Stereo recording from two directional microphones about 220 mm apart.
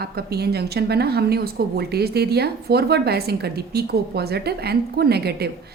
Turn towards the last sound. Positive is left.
turn(degrees=-45)  # may be behind; listen again after turning